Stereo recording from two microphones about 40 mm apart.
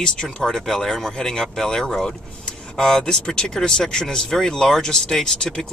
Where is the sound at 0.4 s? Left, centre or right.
Centre.